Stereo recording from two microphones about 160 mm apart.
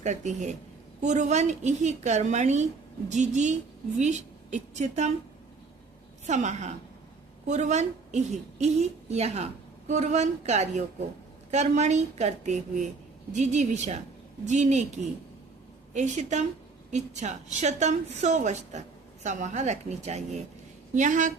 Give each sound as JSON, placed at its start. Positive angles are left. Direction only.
{"t": 0.0, "sound": "a woman's voice", "side_deg": -45}
{"t": 6.2, "sound": "a woman's voice", "side_deg": -45}